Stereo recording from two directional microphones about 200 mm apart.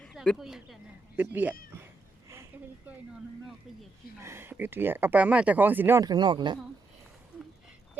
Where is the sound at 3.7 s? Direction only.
Centre (ahead or behind).